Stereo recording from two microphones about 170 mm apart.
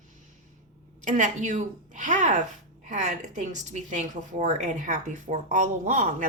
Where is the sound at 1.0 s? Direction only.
45° right (ahead or behind).